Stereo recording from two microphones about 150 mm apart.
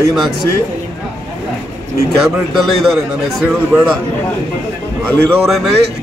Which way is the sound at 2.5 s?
Centre (ahead or behind).